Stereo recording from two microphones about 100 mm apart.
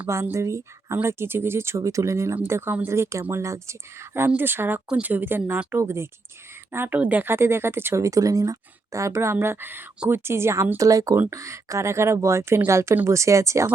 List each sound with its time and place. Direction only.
0.1 s a woman's voice: 25° right (ahead or behind)